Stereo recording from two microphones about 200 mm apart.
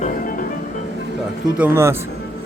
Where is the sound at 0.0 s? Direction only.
40° left (ahead or behind).